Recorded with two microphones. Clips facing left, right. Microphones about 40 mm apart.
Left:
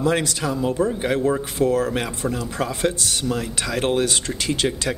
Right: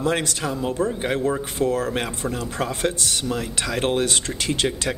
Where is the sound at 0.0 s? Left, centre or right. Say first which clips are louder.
Left 2 dB; right.